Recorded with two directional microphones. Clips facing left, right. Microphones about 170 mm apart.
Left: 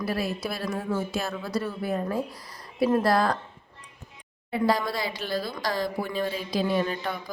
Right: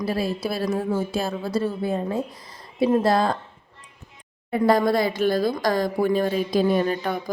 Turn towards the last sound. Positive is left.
turn(degrees=-45)  # may be behind; listen again after turning